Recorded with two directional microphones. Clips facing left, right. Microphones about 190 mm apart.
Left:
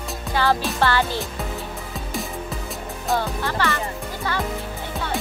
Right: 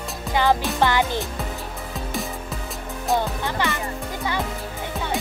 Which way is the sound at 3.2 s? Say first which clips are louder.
Even; 15° right (ahead or behind).